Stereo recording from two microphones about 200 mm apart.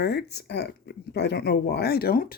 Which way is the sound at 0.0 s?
55° left (ahead or behind).